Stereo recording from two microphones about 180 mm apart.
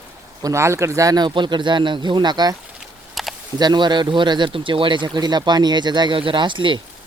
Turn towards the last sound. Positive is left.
turn(degrees=-25)  # may be behind; listen again after turning